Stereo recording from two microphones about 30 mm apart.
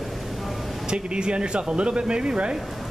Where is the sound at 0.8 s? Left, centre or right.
Right.